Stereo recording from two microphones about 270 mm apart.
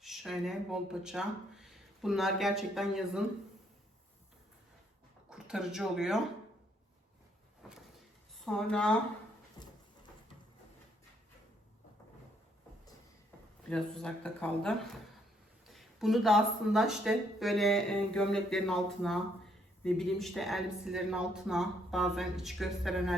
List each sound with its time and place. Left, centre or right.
0.0 s speech: centre
5.3 s speech: centre
7.6 s a sound: centre
8.4 s speech: centre
9.6 s dog: centre
13.7 s speech: centre
15.7 s speech: centre